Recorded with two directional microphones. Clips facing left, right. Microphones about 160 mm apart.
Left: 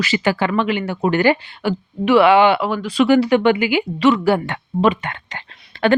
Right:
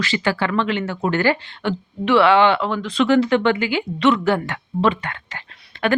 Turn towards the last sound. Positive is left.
turn(degrees=35)  # may be behind; listen again after turning